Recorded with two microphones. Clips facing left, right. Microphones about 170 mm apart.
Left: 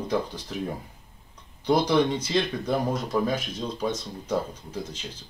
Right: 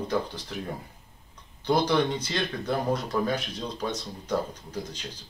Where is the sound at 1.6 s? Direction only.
10° left (ahead or behind).